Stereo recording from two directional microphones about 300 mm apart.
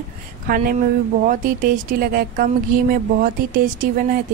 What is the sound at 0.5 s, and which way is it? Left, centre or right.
A woman's voice, right.